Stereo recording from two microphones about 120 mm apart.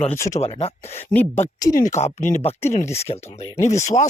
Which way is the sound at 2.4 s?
70° left (ahead or behind).